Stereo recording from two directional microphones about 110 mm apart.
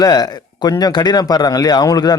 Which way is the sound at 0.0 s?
35° left (ahead or behind).